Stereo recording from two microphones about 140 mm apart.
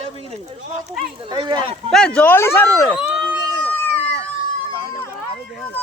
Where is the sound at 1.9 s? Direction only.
5° left (ahead or behind).